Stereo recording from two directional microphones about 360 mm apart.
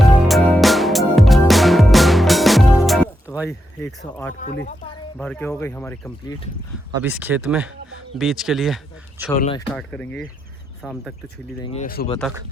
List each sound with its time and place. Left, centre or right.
0.0 s music: centre
3.8 s speech: centre
4.4 s speech: left
5.1 s speech: centre
7.0 s speech: centre
9.4 s speech: centre
9.7 s speech: centre
11.6 s speech: centre